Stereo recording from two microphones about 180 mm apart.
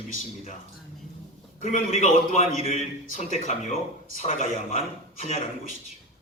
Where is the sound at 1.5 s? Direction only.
45° left (ahead or behind).